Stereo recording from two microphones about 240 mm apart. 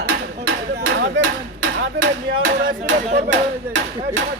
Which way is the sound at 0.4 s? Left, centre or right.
Right.